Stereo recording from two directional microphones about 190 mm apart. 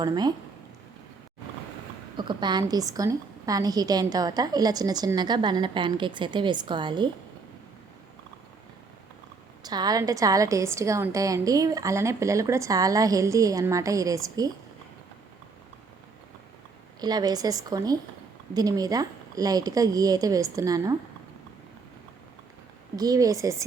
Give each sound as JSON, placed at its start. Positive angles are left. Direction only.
{"t": 0.0, "sound": "a woman's voice", "side_deg": -20}
{"t": 2.1, "sound": "a woman's voice", "side_deg": -25}
{"t": 9.6, "sound": "a woman's voice", "side_deg": -20}
{"t": 17.0, "sound": "a woman's voice", "side_deg": -20}
{"t": 23.0, "sound": "a woman's voice", "side_deg": -20}